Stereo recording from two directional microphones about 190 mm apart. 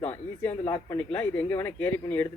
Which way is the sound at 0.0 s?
10° left (ahead or behind).